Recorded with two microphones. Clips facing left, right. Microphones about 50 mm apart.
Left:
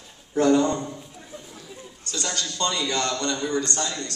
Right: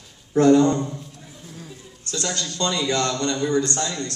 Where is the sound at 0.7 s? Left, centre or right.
Centre.